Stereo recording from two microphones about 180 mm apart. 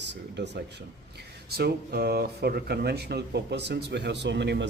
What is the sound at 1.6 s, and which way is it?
A man's voice, 65° right (ahead or behind).